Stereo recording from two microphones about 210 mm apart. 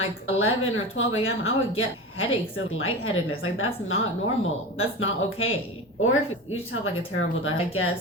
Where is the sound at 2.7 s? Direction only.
75° left (ahead or behind).